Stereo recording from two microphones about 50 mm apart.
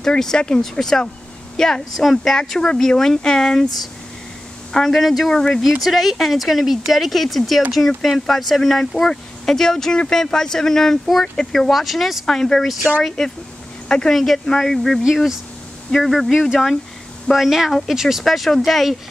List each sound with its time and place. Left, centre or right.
0.0 s speech: centre
4.7 s speech: centre
5.3 s speech: centre
5.6 s speech: centre
11.7 s speech: centre
12.3 s speech: centre
14.1 s speech: centre
15.0 s speech: centre